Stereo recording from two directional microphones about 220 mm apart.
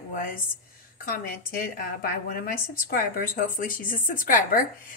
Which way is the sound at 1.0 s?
40° left (ahead or behind).